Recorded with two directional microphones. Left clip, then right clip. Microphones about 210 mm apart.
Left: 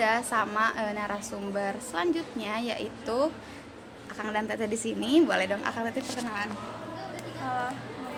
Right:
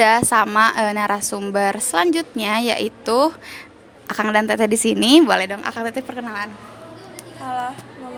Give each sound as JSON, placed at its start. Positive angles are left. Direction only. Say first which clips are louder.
{"t": 0.0, "sound": "a woman's voice", "louder": "right 12 dB", "side_deg": -55}